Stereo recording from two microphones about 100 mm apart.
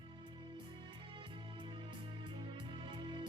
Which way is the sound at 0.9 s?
60° right (ahead or behind).